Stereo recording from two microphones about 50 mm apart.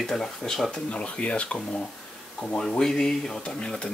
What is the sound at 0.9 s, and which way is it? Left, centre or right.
Speech, left.